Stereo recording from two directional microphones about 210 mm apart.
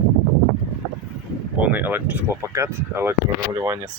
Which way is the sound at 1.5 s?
10° right (ahead or behind).